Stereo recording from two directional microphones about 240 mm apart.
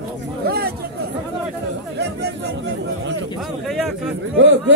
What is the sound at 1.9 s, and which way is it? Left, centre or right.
A man's voice, right.